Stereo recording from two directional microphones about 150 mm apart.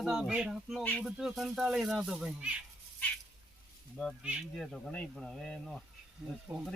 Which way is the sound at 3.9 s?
5° right (ahead or behind).